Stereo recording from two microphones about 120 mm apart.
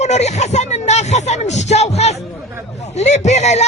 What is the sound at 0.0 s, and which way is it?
Speech, 70° left (ahead or behind).